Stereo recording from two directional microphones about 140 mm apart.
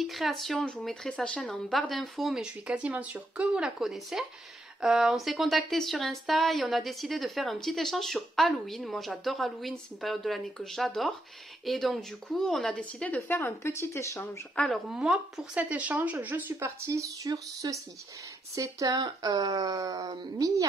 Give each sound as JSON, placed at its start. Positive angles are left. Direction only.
{"t": 0.0, "sound": "a woman's voice", "side_deg": 0}
{"t": 14.5, "sound": "a woman's voice", "side_deg": 10}
{"t": 14.9, "sound": "speech", "side_deg": -5}